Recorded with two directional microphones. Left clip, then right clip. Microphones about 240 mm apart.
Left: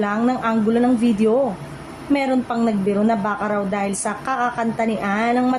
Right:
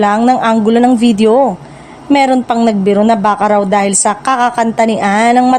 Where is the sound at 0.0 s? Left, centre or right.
Right.